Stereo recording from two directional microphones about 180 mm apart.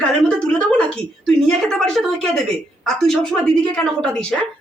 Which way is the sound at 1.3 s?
5° left (ahead or behind).